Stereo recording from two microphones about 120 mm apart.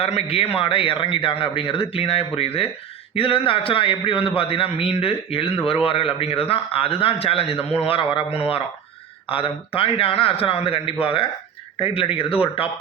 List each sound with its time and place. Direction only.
0.0 s a man's voice: 55° left (ahead or behind)